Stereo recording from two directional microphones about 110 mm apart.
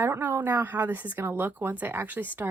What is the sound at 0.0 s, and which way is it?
A woman's voice, 20° right (ahead or behind).